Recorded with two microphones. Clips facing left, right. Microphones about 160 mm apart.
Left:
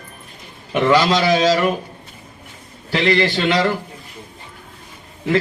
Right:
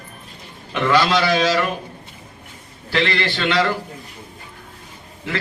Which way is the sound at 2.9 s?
20° left (ahead or behind).